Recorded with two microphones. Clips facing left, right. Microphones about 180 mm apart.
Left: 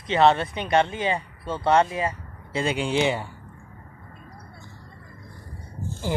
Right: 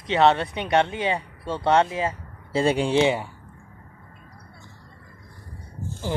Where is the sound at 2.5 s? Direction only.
35° right (ahead or behind).